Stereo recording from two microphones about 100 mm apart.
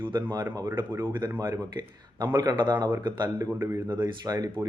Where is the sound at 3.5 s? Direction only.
20° right (ahead or behind).